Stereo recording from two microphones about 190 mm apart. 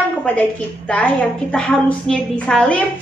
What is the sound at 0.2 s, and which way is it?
A woman's voice, 5° left (ahead or behind).